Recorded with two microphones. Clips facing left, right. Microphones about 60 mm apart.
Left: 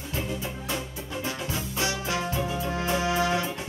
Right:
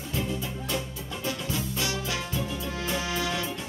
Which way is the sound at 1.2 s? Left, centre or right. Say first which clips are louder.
Right 2 dB; left.